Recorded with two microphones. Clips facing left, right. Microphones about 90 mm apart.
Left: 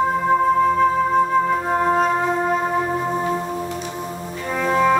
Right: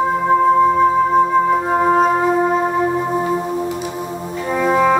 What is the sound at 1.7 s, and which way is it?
Music, 10° right (ahead or behind).